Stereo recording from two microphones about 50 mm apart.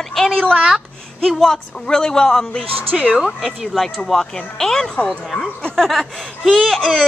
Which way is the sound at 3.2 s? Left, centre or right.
Centre.